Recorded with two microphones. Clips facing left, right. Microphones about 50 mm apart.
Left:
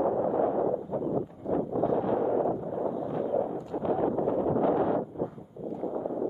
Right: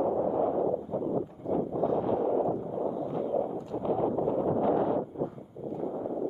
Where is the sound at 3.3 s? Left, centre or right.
Left.